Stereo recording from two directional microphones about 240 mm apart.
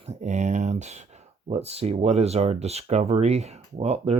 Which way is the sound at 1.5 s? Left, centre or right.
Right.